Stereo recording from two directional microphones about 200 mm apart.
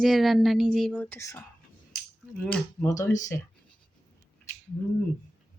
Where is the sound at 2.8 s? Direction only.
15° left (ahead or behind).